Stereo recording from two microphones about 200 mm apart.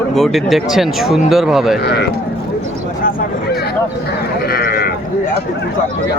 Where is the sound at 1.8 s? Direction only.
55° left (ahead or behind).